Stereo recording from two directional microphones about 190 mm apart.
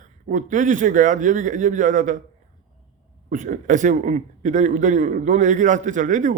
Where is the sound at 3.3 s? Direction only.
40° right (ahead or behind).